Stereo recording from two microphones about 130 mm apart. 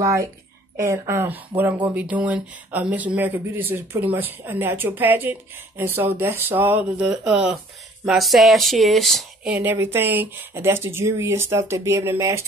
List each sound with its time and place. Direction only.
0.0 s speech: 25° right (ahead or behind); by 9.5 s centre (ahead or behind)
9.5 s speech: 15° right (ahead or behind)